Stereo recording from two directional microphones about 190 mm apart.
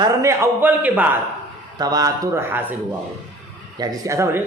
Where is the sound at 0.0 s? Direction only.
15° right (ahead or behind).